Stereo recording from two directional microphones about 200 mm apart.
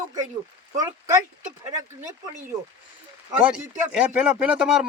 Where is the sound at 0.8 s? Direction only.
15° right (ahead or behind).